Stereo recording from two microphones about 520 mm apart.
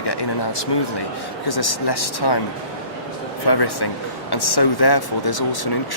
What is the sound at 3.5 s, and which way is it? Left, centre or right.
Speech, left.